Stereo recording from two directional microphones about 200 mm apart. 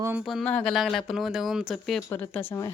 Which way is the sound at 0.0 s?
5° right (ahead or behind).